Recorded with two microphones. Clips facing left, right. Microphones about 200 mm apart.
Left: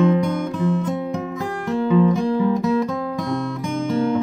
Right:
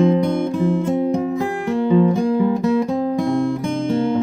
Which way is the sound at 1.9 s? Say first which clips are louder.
Right 1 dB; 30° right (ahead or behind).